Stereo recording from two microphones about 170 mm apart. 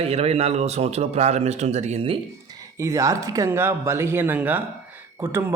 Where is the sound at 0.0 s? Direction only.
35° right (ahead or behind).